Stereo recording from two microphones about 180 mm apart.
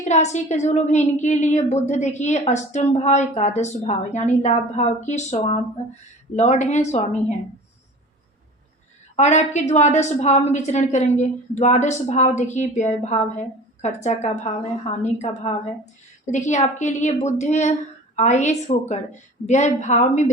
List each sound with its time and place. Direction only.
0.0 s a woman's voice: 40° left (ahead or behind)
9.1 s a woman's voice: 40° left (ahead or behind)